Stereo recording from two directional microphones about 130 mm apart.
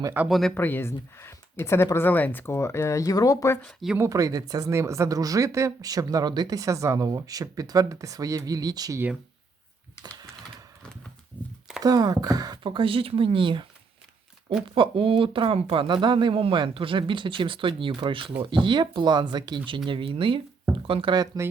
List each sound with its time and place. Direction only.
0.3 s speech: centre (ahead or behind)
0.5 s speech: 15° left (ahead or behind)
3.7 s speech: centre (ahead or behind)
3.9 s speech: 25° right (ahead or behind)
11.8 s speech: 30° right (ahead or behind)
14.8 s speech: 40° right (ahead or behind)